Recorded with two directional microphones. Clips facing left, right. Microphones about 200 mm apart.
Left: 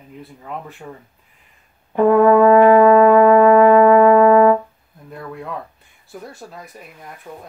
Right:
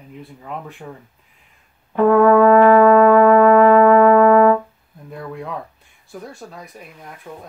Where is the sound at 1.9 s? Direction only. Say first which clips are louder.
Even; 20° left (ahead or behind).